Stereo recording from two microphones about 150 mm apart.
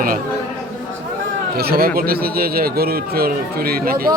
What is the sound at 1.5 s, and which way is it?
Speech, 90° right.